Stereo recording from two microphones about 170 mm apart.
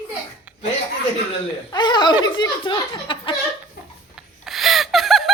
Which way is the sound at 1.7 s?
25° left (ahead or behind).